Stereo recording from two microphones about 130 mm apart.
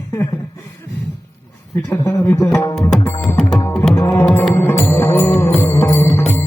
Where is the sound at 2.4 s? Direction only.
15° left (ahead or behind).